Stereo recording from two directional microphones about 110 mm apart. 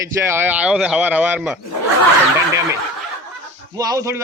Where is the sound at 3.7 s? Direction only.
35° right (ahead or behind).